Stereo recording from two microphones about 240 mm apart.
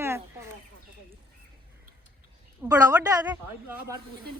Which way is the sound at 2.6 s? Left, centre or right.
Centre.